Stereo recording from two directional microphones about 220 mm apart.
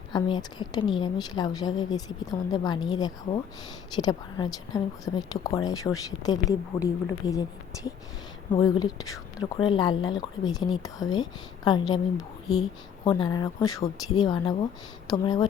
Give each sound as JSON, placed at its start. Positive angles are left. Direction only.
{"t": 0.1, "sound": "a woman's voice", "side_deg": 20}
{"t": 8.6, "sound": "a woman's voice", "side_deg": 15}